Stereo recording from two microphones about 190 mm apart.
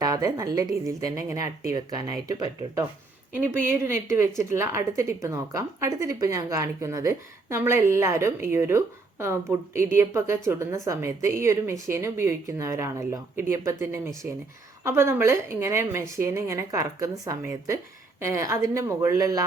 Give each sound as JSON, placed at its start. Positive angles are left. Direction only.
{"t": 0.0, "sound": "a woman's voice", "side_deg": -20}